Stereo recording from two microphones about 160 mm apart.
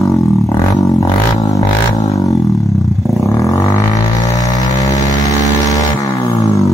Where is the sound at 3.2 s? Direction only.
20° left (ahead or behind).